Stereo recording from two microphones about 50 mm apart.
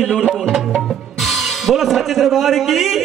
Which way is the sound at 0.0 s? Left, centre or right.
Centre.